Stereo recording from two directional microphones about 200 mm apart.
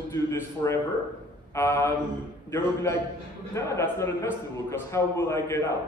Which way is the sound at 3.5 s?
15° left (ahead or behind).